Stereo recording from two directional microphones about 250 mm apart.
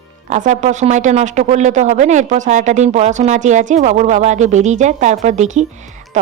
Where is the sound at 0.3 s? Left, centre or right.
Right.